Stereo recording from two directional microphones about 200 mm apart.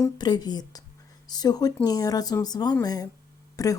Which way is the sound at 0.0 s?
20° left (ahead or behind).